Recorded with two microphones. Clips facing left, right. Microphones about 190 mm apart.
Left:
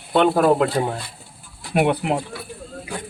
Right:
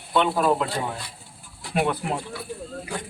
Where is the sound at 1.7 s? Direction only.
60° left (ahead or behind).